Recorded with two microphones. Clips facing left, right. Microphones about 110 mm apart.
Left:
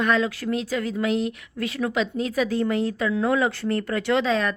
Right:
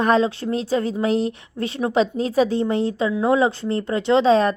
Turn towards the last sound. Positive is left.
turn(degrees=-30)  # may be behind; listen again after turning